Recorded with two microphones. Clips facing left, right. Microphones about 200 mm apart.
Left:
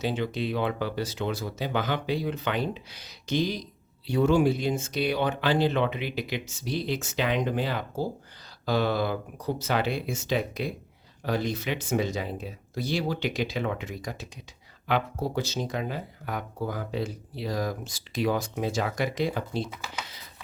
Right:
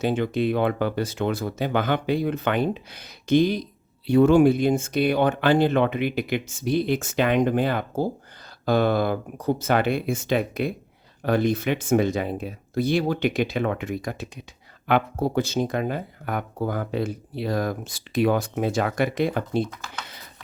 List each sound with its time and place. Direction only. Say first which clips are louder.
0.0 s speech: right 6 dB; 55° right (ahead or behind)